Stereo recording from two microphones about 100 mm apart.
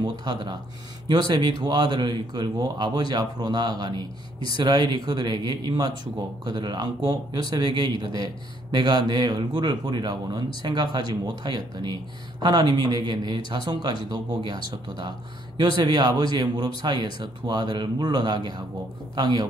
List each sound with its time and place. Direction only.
0.2 s speech: 45° right (ahead or behind)